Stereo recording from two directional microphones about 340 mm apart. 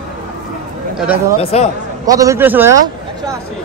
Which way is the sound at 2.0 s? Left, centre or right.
Centre.